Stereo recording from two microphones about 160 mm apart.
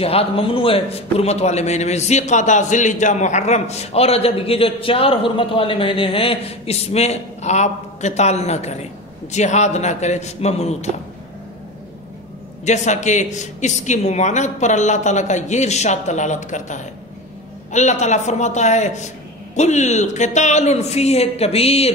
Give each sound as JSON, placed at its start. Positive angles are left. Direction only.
{"t": 0.0, "sound": "a man's voice", "side_deg": 40}
{"t": 12.6, "sound": "speech", "side_deg": 45}